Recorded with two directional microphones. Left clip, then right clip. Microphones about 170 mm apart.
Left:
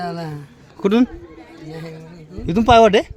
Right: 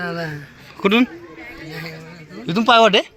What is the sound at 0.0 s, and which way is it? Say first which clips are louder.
Speech: right 1 dB; 90° left.